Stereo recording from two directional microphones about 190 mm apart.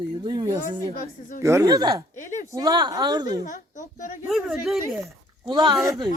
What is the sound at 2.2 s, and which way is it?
Speech, 40° left (ahead or behind).